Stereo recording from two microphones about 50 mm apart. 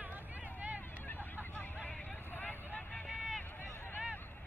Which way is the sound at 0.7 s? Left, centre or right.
Left.